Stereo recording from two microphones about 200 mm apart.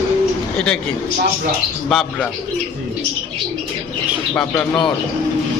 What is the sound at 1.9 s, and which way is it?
Speech, centre (ahead or behind).